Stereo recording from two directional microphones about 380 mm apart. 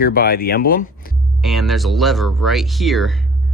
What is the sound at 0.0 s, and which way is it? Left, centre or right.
Speech, left.